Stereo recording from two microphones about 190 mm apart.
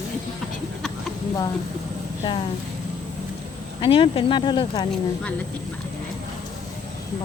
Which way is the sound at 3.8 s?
30° left (ahead or behind).